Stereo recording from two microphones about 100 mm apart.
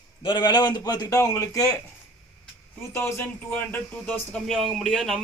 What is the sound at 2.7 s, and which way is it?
Speech, 25° left (ahead or behind).